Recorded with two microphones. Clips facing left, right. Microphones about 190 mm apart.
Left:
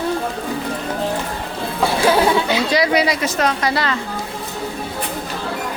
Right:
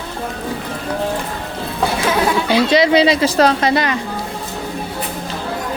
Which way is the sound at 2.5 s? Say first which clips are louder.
Right 4 dB; 25° right (ahead or behind).